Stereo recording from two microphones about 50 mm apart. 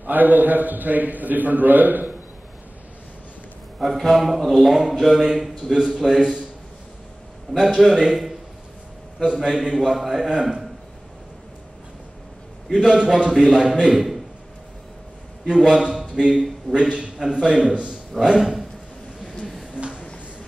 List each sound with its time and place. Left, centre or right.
0.0 s a man's voice: right
3.8 s a man's voice: centre
7.5 s a man's voice: centre
12.7 s a man's voice: centre
15.4 s a man's voice: centre
19.4 s a sound: centre
19.7 s a sound: right